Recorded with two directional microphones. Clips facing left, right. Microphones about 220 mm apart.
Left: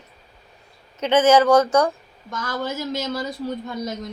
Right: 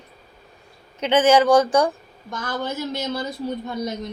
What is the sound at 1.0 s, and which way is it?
Speech, 15° right (ahead or behind).